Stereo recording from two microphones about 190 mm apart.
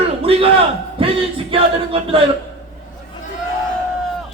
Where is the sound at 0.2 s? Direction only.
30° right (ahead or behind).